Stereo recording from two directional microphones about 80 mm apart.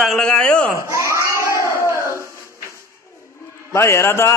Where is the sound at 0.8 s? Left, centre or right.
Right.